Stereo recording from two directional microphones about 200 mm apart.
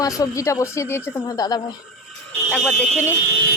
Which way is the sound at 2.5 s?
5° left (ahead or behind).